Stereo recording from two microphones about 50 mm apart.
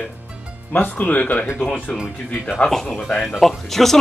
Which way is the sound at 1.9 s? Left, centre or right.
Centre.